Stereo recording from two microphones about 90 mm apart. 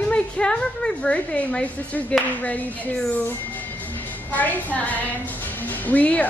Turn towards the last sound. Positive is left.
turn(degrees=15)  # may be behind; listen again after turning